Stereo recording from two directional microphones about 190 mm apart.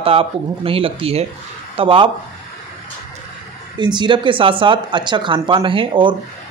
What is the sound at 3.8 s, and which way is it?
Speech, 25° right (ahead or behind).